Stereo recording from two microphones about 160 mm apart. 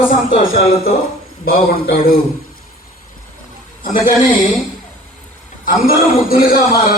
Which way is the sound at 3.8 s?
55° left (ahead or behind).